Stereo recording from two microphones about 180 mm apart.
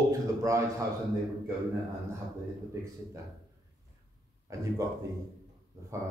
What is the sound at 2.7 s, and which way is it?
Speech, 15° right (ahead or behind).